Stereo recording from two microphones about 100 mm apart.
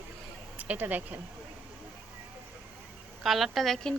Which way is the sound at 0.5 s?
15° right (ahead or behind).